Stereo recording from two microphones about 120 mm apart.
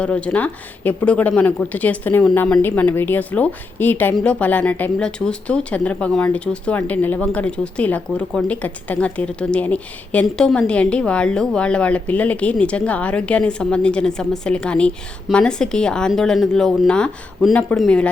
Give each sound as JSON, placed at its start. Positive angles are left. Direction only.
{"t": 0.0, "sound": "speech", "side_deg": 10}